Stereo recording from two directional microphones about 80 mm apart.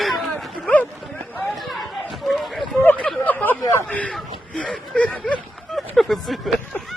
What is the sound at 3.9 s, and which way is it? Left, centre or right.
A man's voice, centre.